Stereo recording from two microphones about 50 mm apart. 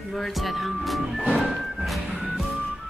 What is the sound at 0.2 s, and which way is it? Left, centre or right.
Speech, centre.